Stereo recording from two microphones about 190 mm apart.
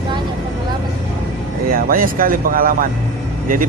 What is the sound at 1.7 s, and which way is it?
Speech, 50° right (ahead or behind).